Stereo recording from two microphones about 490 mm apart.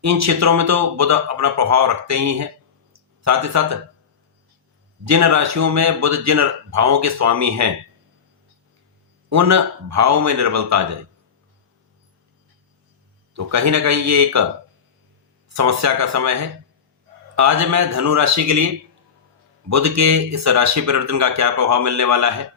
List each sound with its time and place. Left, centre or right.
0.0 s speech: right
5.0 s speech: right
9.3 s speech: right
13.3 s speech: right
15.4 s speech: right
19.7 s speech: right